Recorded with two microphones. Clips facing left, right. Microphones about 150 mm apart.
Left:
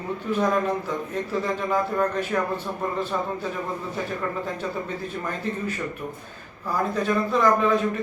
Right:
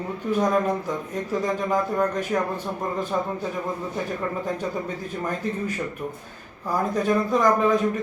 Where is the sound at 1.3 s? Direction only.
15° right (ahead or behind).